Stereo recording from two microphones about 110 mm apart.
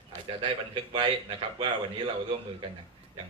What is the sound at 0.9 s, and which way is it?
A man's voice, 50° right (ahead or behind).